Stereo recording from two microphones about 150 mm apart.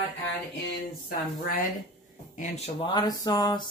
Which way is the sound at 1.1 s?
75° left (ahead or behind).